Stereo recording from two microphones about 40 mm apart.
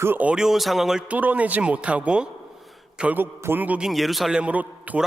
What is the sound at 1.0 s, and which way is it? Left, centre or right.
A man's voice, right.